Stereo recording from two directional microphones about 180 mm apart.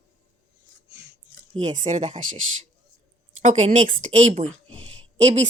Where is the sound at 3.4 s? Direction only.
40° right (ahead or behind).